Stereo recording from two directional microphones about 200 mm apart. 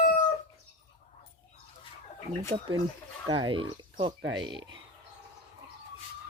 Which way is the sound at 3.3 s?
25° right (ahead or behind).